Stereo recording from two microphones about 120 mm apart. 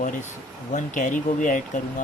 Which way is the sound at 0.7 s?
90° left.